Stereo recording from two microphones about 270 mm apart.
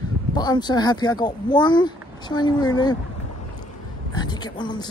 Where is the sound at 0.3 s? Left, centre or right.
Centre.